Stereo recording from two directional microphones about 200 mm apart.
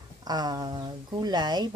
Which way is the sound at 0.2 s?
20° right (ahead or behind).